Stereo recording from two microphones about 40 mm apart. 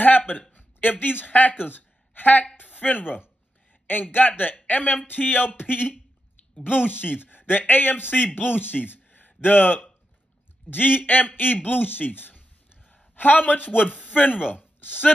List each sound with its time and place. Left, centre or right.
0.0 s a woman's voice: left